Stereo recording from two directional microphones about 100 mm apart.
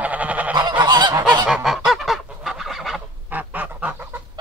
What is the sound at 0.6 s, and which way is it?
Goose, 45° right (ahead or behind).